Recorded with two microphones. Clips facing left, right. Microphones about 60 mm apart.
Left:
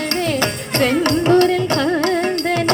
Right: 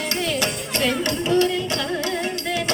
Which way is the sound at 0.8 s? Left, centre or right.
Left.